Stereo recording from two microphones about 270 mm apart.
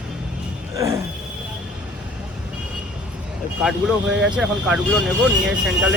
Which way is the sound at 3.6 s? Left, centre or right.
Centre.